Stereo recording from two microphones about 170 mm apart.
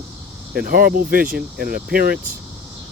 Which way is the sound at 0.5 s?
60° right (ahead or behind).